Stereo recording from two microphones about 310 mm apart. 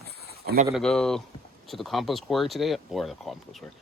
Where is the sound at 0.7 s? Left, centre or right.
Centre.